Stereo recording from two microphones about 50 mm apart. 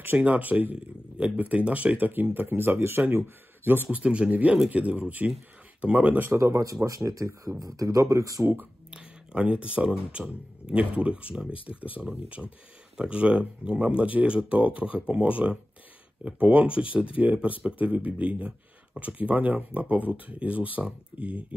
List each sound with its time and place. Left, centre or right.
0.2 s speech: right
4.0 s speech: centre
6.3 s speech: right
7.8 s speech: right
8.9 s speech: right
12.4 s speech: centre
13.0 s speech: right